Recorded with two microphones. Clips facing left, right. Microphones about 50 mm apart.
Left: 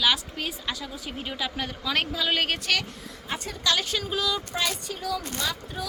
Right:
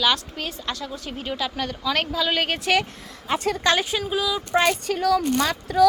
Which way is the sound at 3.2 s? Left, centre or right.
Right.